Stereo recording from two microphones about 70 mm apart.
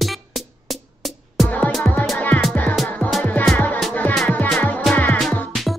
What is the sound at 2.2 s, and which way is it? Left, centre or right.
Music, left.